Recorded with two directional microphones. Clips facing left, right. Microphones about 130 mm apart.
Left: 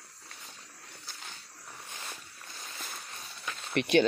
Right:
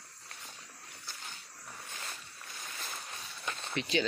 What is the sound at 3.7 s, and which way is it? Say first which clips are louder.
Speech: left 8 dB; 60° left (ahead or behind).